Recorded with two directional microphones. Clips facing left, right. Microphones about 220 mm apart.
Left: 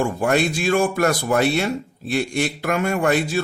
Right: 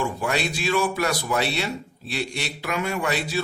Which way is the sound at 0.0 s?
50° left (ahead or behind).